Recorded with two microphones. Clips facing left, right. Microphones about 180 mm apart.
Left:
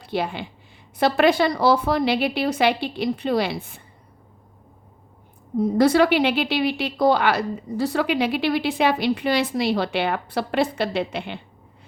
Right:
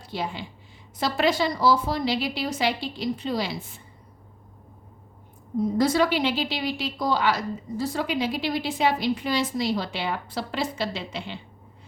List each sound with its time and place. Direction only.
0.0 s a woman's voice: 60° left (ahead or behind)
5.5 s speech: 65° left (ahead or behind)